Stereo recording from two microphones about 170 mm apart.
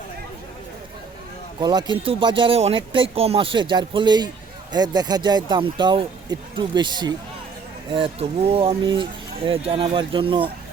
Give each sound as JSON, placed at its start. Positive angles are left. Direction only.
{"t": 1.5, "sound": "speech", "side_deg": -25}